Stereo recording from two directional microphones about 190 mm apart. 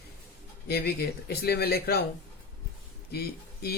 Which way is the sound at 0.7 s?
55° left (ahead or behind).